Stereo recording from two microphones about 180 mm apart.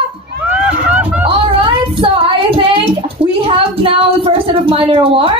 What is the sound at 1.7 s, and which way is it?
Child singing, 30° right (ahead or behind).